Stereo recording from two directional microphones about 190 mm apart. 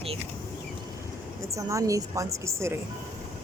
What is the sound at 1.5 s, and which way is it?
Speech, 15° right (ahead or behind).